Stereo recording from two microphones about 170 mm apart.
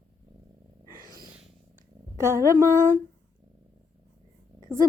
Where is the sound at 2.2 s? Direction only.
15° right (ahead or behind).